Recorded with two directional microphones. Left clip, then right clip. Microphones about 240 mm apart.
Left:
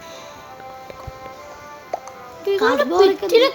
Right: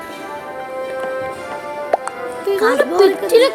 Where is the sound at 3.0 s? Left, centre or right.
Centre.